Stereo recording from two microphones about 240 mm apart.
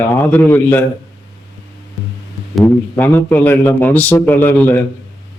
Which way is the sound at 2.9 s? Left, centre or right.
Centre.